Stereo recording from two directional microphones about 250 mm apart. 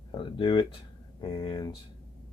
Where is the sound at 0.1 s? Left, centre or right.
Centre.